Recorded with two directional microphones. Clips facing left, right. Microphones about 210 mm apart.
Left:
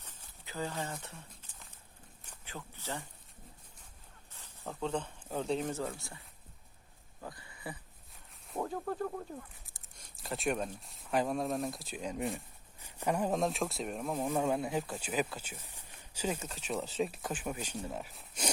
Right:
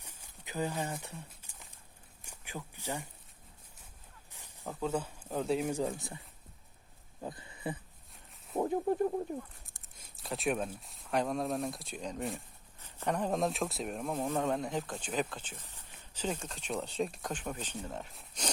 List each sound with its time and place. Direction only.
0.0 s a sound: 10° right (ahead or behind)
2.2 s speech: 10° right (ahead or behind)
4.3 s a sound: 15° right (ahead or behind)
4.7 s speech: 5° right (ahead or behind)
7.2 s speech: 20° right (ahead or behind)
9.6 s speech: centre (ahead or behind)
14.2 s speech: 10° left (ahead or behind)